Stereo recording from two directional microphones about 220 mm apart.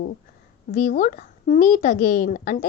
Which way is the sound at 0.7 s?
35° left (ahead or behind).